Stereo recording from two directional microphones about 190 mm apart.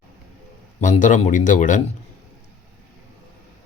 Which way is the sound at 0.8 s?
40° left (ahead or behind).